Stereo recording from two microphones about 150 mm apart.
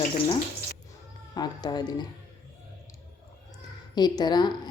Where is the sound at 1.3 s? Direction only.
25° left (ahead or behind).